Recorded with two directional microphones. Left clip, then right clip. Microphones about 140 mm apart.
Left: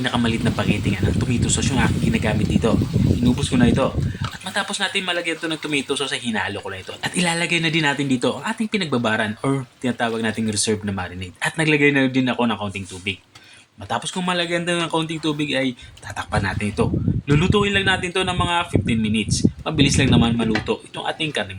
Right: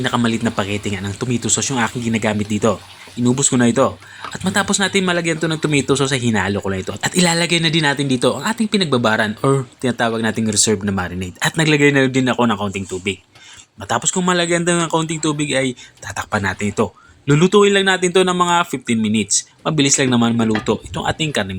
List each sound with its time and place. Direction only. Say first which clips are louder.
0.0 s speech: right 3 dB; 35° right (ahead or behind)